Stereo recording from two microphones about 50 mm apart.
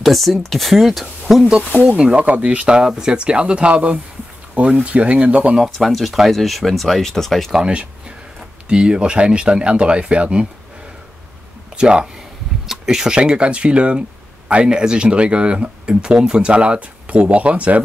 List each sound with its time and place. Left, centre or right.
0.0 s speech: centre
1.5 s speech: right
5.6 s speech: centre
8.6 s speech: centre
11.7 s speech: centre